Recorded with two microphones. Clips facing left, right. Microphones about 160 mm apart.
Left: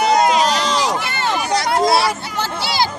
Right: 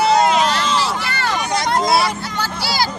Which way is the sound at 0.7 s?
20° left (ahead or behind).